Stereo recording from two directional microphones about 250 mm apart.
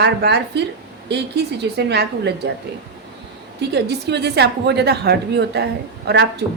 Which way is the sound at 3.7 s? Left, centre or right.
Right.